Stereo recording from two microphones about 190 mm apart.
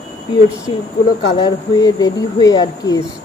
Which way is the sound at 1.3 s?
20° left (ahead or behind).